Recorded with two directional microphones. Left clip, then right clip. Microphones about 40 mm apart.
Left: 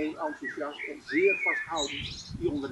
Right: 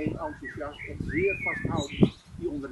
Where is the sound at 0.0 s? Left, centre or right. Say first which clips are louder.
Left 1 dB; right.